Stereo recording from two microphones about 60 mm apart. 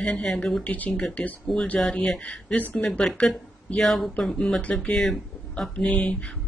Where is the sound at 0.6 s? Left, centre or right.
Left.